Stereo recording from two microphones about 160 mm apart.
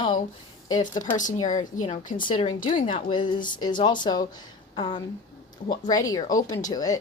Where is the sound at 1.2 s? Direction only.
50° left (ahead or behind).